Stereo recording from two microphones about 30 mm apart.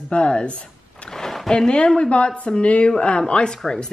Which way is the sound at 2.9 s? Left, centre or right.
Left.